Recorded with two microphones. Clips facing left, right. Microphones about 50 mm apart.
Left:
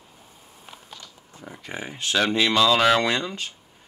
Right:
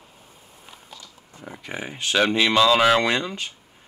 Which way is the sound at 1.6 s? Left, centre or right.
Right.